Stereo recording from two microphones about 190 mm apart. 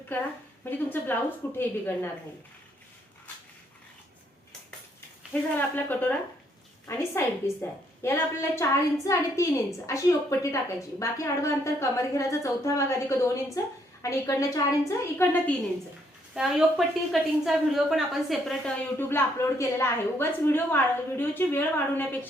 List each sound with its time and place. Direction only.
0.6 s a woman's voice: 10° left (ahead or behind)
4.9 s a woman's voice: 10° left (ahead or behind)
16.3 s a woman's voice: 5° right (ahead or behind)